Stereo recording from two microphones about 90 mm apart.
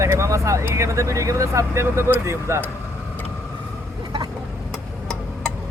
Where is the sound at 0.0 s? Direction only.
35° right (ahead or behind).